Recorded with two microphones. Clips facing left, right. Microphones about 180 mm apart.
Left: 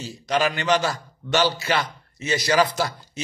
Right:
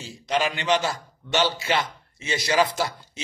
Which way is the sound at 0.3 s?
25° right (ahead or behind).